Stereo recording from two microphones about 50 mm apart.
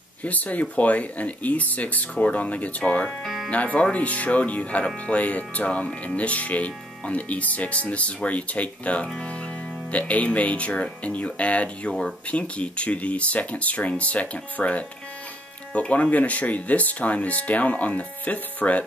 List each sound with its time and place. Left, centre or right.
0.2 s speech: left